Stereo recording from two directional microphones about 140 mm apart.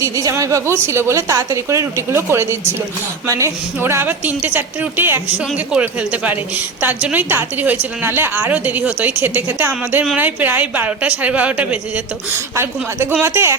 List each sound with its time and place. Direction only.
0.0 s a woman's voice: 25° right (ahead or behind)